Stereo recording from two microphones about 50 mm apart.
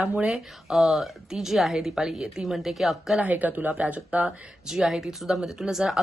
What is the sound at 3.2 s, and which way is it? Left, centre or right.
Speech, right.